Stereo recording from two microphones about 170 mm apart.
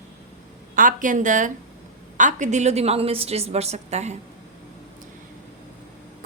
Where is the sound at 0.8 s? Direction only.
50° right (ahead or behind).